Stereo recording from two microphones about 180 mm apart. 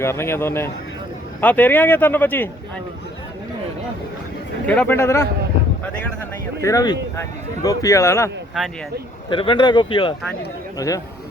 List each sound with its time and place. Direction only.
0.0 s speech: 15° left (ahead or behind)
4.6 s speech: 10° left (ahead or behind)
6.6 s speech: 15° left (ahead or behind)
9.3 s speech: 30° left (ahead or behind)